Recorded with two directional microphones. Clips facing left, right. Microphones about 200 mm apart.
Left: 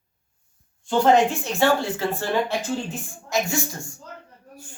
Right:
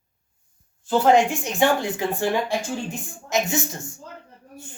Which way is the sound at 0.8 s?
5° right (ahead or behind).